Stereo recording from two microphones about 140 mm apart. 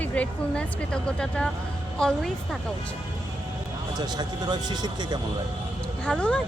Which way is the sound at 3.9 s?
30° right (ahead or behind).